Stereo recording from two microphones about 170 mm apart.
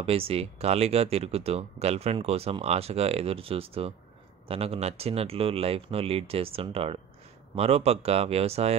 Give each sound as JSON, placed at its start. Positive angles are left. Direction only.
{"t": 0.0, "sound": "speech", "side_deg": -35}